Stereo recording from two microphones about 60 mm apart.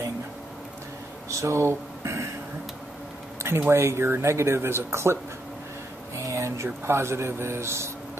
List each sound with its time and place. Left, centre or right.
1.4 s speech: right
3.4 s a sound: right
3.7 s speech: right
6.1 s speech: right